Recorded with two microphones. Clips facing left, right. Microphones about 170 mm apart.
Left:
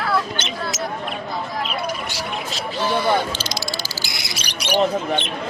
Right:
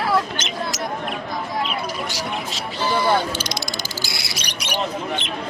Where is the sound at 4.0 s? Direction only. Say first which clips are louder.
Right 1 dB; 20° left (ahead or behind).